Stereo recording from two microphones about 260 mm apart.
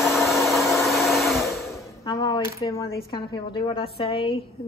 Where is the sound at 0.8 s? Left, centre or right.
Centre.